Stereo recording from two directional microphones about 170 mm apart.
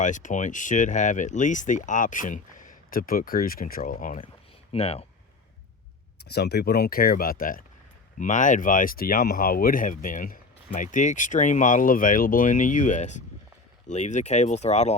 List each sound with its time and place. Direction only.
0.0 s speech: 45° left (ahead or behind)
4.7 s speech: 35° left (ahead or behind)
6.2 s speech: 75° left (ahead or behind); by 14.9 s 40° left (ahead or behind)